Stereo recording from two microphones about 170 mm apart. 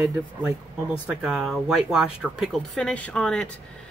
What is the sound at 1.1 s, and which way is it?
Speech, 5° right (ahead or behind).